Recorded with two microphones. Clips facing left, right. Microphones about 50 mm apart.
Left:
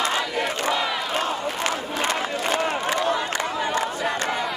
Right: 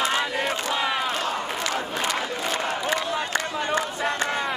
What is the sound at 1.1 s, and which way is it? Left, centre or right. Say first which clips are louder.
Crowd: left 2 dB; left.